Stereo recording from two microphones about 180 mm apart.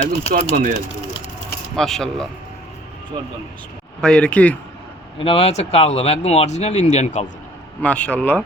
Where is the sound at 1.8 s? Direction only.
Centre (ahead or behind).